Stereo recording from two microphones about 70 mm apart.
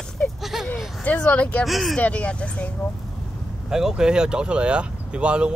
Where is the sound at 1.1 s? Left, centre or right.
Left.